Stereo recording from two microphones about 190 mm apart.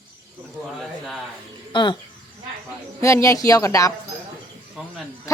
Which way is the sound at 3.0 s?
15° left (ahead or behind).